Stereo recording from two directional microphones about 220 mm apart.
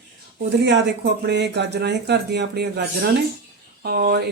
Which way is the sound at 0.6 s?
50° right (ahead or behind).